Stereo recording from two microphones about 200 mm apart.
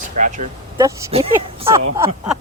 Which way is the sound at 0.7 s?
15° right (ahead or behind).